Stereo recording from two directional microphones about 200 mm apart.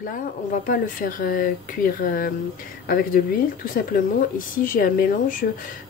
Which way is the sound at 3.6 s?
45° left (ahead or behind).